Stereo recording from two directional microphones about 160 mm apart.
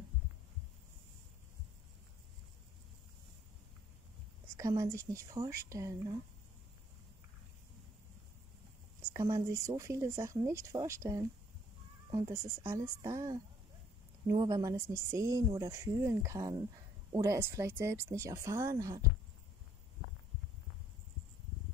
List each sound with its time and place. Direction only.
4.6 s speech: 20° right (ahead or behind)
9.1 s speech: 20° right (ahead or behind)
12.3 s speech: 15° right (ahead or behind)